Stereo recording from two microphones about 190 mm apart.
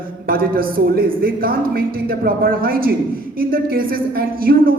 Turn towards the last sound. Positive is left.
turn(degrees=-50)  # may be behind; listen again after turning